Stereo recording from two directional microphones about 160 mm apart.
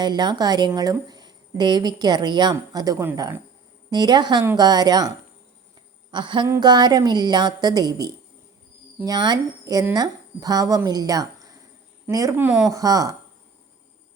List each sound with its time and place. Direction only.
0.0 s a woman's voice: 25° right (ahead or behind)
6.1 s a sound: 30° right (ahead or behind)
6.5 s a woman's voice: 25° right (ahead or behind)